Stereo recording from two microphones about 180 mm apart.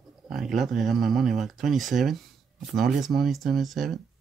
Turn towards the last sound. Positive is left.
turn(degrees=0)  # may be behind; listen again after turning